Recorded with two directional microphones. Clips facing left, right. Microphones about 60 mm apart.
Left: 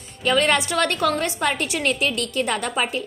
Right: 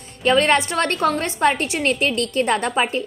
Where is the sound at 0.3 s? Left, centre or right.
Right.